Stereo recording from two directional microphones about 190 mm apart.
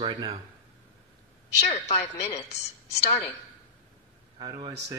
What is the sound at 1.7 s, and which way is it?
A woman's voice, 35° left (ahead or behind).